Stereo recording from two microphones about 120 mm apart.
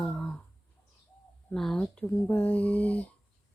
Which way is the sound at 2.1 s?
20° left (ahead or behind).